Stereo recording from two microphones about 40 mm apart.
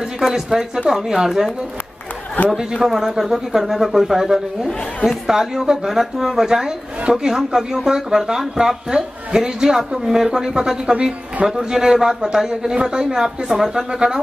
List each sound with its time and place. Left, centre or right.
0.0 s speech: centre
2.7 s speech: centre
7.0 s speech: right
7.2 s speech: centre